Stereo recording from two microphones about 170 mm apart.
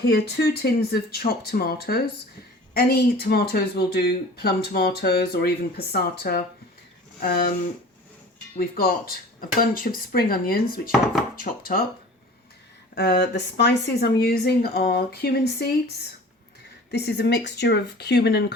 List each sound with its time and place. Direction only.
0.1 s speech: 70° left (ahead or behind)
8.5 s speech: 60° left (ahead or behind)
12.9 s speech: 70° left (ahead or behind)
16.9 s speech: 75° left (ahead or behind)